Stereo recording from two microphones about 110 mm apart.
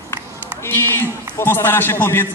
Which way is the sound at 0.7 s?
20° left (ahead or behind).